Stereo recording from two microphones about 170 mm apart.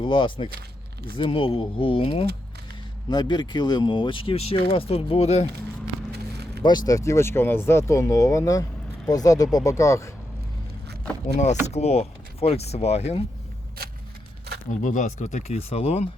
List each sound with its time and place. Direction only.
0.0 s speech: 30° left (ahead or behind)
6.1 s a sound: 75° right (ahead or behind)
6.6 s speech: 25° left (ahead or behind)
11.3 s speech: 40° left (ahead or behind)
14.8 s speech: 50° left (ahead or behind)